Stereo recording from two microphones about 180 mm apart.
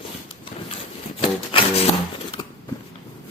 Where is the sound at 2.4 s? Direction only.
25° left (ahead or behind).